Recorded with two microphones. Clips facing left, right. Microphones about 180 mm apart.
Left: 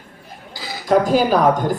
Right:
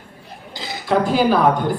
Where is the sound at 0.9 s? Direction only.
40° left (ahead or behind).